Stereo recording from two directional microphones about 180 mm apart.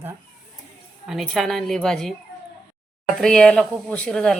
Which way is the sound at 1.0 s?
Centre (ahead or behind).